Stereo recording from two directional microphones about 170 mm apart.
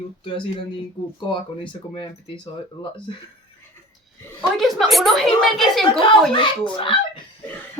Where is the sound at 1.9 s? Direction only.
30° left (ahead or behind).